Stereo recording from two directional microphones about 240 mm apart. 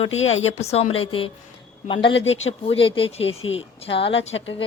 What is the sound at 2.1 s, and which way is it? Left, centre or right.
Speech, left.